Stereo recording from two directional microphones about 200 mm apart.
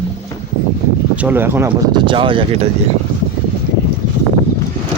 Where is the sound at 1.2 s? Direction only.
10° right (ahead or behind).